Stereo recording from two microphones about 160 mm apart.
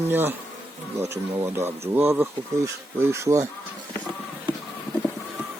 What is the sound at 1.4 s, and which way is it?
Speech, 15° right (ahead or behind).